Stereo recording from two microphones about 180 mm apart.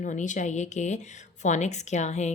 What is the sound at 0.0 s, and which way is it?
A woman's voice, 45° left (ahead or behind).